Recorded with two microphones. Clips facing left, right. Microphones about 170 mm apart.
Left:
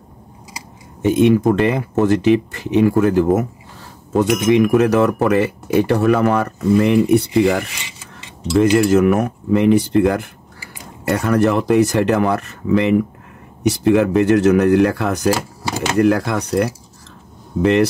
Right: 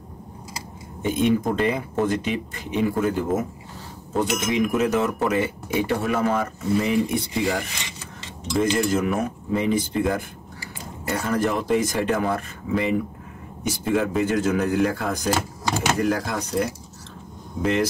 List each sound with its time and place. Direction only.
1.0 s speech: 75° left (ahead or behind)
8.7 s speech: 75° left (ahead or behind)
11.1 s speech: 70° left (ahead or behind)